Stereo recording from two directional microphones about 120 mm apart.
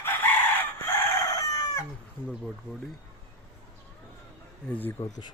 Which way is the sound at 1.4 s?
30° left (ahead or behind).